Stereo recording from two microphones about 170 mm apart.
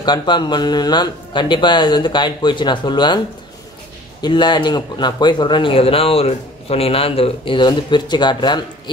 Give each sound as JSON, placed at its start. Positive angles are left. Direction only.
{"t": 0.0, "sound": "speech", "side_deg": 25}
{"t": 4.2, "sound": "speech", "side_deg": 25}